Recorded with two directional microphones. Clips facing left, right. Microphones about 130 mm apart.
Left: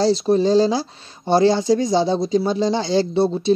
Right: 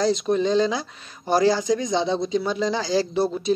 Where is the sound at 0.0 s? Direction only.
35° left (ahead or behind).